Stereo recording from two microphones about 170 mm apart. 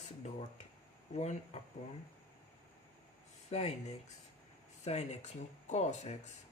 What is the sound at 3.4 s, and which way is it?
Speech, 40° left (ahead or behind).